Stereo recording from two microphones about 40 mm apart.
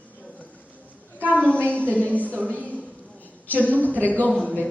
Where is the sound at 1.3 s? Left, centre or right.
Left.